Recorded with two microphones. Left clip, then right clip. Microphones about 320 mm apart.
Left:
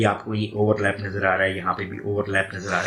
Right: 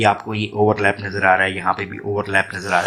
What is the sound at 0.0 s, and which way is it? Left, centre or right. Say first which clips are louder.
Speech: right 6 dB; right.